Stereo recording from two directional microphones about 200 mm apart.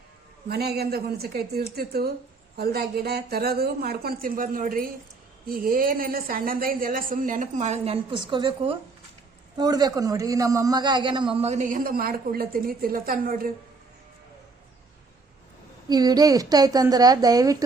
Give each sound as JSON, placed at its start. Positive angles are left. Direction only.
{"t": 0.4, "sound": "a woman's voice", "side_deg": -55}
{"t": 15.9, "sound": "a man's voice", "side_deg": -20}